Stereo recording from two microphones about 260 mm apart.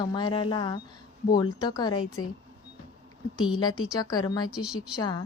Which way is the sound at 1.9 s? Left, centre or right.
Left.